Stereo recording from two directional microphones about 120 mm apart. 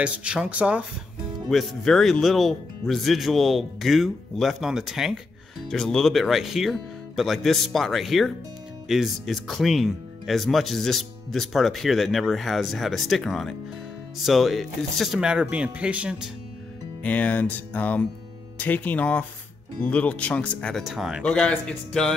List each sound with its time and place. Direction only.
0.0 s speech: 10° right (ahead or behind)
1.5 s speech: centre (ahead or behind)
17.0 s speech: 10° left (ahead or behind)
20.8 s speech: 5° right (ahead or behind)
21.2 s speech: 10° left (ahead or behind)